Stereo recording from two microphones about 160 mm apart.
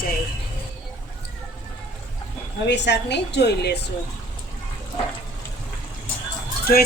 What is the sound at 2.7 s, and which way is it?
A woman's voice, 90° left.